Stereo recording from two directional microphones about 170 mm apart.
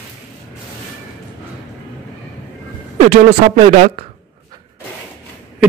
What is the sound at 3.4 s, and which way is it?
Speech, 45° right (ahead or behind).